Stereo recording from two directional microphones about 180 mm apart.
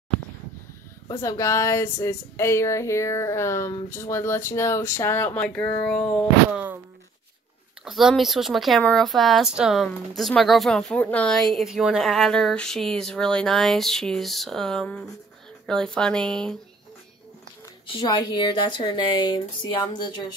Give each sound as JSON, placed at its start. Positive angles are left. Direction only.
{"t": 1.0, "sound": "speech", "side_deg": 20}
{"t": 6.5, "sound": "speech", "side_deg": -10}
{"t": 7.8, "sound": "speech", "side_deg": 0}
{"t": 18.0, "sound": "speech", "side_deg": 25}